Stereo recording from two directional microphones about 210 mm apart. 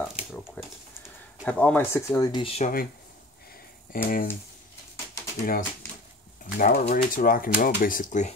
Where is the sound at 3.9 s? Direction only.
40° left (ahead or behind).